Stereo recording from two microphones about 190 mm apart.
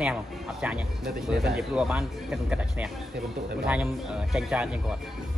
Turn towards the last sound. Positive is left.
turn(degrees=0)  # may be behind; listen again after turning